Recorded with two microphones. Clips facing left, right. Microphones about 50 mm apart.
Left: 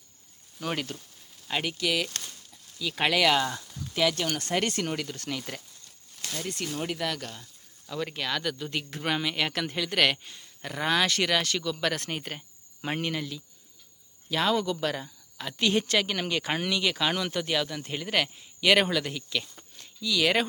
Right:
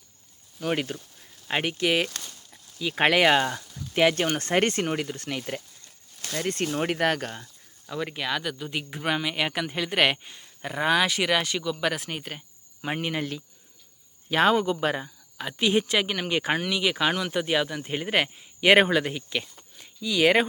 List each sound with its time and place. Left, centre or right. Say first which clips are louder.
0.8 s speech: right 4 dB; centre
1.5 s speech: right 4 dB; right
4.9 s speech: right 3 dB; right
6.3 s speech: right 6 dB; right
7.9 s speech: right 2 dB; centre
14.3 s speech: right 5 dB; right